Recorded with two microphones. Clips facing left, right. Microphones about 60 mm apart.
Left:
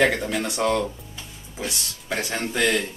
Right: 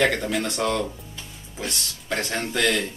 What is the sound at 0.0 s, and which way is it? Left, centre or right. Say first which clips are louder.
Speech: left 1 dB; centre.